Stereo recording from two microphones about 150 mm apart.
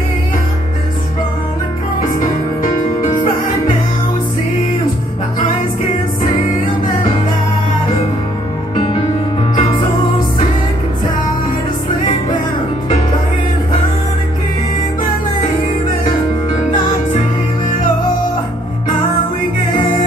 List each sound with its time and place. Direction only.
9.6 s music: 35° left (ahead or behind)